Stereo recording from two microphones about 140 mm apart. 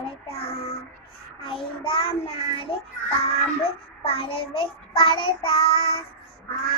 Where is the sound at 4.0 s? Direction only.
40° left (ahead or behind).